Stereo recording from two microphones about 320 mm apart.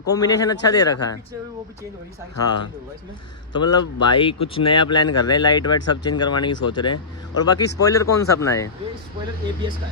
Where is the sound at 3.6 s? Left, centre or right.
Centre.